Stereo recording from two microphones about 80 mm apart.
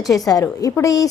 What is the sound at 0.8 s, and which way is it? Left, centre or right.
Speech, left.